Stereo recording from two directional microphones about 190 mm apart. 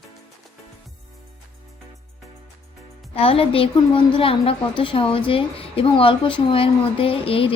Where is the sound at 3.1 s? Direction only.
30° left (ahead or behind).